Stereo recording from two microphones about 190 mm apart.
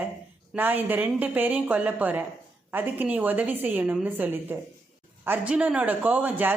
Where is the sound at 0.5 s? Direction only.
10° right (ahead or behind).